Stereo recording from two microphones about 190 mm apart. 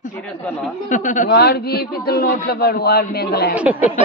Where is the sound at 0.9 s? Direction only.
45° left (ahead or behind).